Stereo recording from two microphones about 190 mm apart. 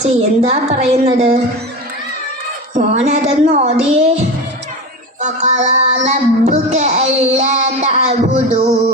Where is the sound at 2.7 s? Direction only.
35° right (ahead or behind).